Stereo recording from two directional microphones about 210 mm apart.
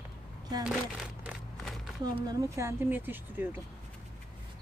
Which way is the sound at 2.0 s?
20° right (ahead or behind).